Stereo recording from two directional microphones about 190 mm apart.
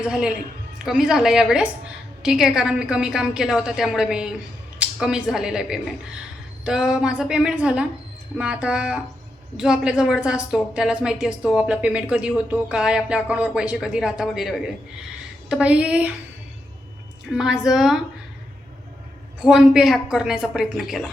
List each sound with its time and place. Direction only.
0.0 s a woman's voice: 5° right (ahead or behind)
17.3 s a woman's voice: 5° right (ahead or behind)
19.4 s a woman's voice: 5° right (ahead or behind)